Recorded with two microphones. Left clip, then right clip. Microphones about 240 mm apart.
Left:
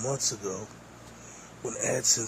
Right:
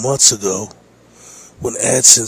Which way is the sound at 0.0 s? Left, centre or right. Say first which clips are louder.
Right 16 dB; right.